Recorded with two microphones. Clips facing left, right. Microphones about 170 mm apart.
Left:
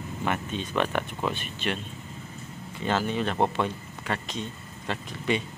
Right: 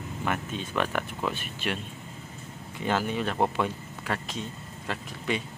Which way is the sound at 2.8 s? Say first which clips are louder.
Left 1 dB; 10° right (ahead or behind).